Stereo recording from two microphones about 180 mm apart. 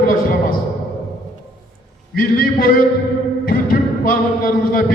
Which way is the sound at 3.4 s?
55° left (ahead or behind).